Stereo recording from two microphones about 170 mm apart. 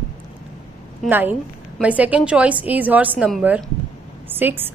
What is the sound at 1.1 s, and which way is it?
A woman's voice, 10° right (ahead or behind).